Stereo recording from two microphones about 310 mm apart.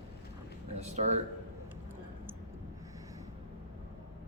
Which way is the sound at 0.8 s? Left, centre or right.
Right.